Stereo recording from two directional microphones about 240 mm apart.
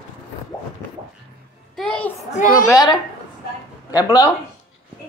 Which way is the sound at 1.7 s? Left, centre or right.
Centre.